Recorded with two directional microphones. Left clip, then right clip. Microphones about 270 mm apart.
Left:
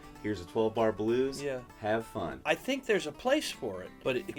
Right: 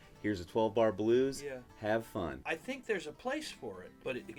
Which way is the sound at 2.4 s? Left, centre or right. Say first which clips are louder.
Left 10 dB; left.